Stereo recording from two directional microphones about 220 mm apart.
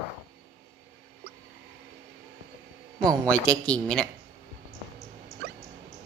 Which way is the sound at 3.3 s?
5° left (ahead or behind).